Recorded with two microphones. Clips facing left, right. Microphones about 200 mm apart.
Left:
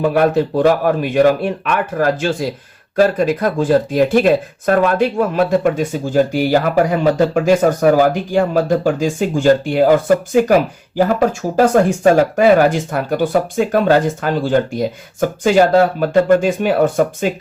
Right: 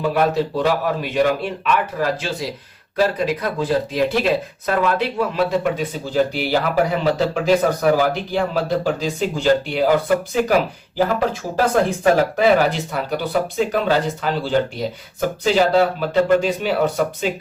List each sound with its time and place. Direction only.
0.0 s speech: 55° left (ahead or behind)